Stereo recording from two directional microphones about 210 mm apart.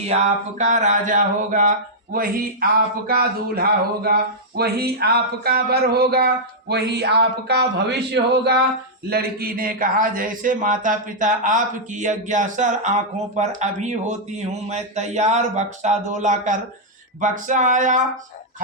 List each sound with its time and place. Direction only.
0.6 s speech: 35° right (ahead or behind)
2.1 s a sound: 45° right (ahead or behind)
9.0 s speech: 45° right (ahead or behind)